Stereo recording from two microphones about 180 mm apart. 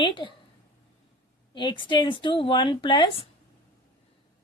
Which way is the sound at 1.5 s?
25° left (ahead or behind).